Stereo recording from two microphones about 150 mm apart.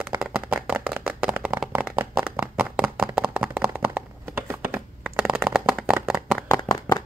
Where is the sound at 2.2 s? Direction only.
5° right (ahead or behind).